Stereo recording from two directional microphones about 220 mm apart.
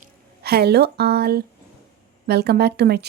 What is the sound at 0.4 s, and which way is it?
A woman's voice, 45° right (ahead or behind).